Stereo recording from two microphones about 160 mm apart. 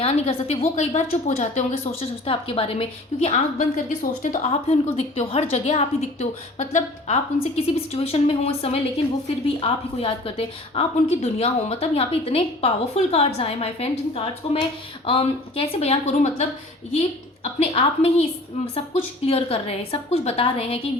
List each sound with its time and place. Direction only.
0.0 s a woman's voice: 40° left (ahead or behind); by 4.4 s 55° left (ahead or behind)
4.9 s a woman's voice: 40° left (ahead or behind)